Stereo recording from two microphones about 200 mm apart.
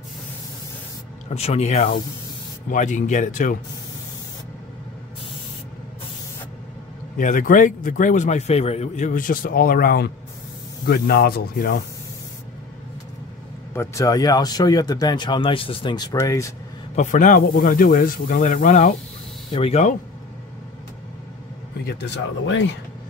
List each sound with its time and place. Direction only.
1.3 s a man's voice: 35° left (ahead or behind)
7.2 s a man's voice: 40° left (ahead or behind)
13.7 s speech: 15° left (ahead or behind)
16.9 s a man's voice: 40° left (ahead or behind)
21.8 s speech: 60° left (ahead or behind)